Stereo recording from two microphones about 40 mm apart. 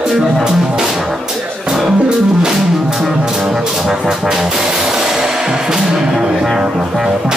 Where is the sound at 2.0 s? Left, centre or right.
Centre.